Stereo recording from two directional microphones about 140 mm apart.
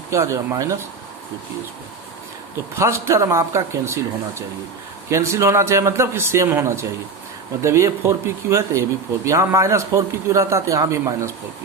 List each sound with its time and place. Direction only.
0.1 s a man's voice: 20° right (ahead or behind)
2.7 s a man's voice: 20° right (ahead or behind)